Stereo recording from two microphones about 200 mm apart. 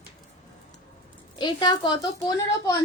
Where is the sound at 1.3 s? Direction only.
20° left (ahead or behind).